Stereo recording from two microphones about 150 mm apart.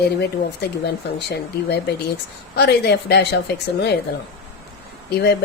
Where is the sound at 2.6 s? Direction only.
90° left.